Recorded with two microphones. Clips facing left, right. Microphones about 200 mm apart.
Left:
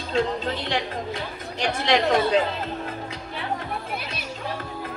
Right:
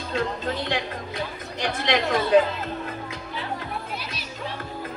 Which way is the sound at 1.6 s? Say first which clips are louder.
Left 2 dB; 50° right (ahead or behind).